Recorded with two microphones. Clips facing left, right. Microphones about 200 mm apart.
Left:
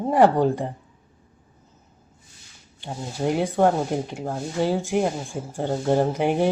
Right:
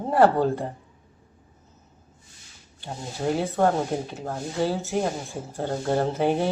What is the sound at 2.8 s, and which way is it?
Speech, 15° left (ahead or behind).